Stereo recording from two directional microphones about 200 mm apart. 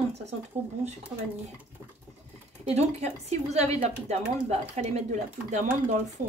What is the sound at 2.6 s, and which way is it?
A woman's voice, 35° right (ahead or behind).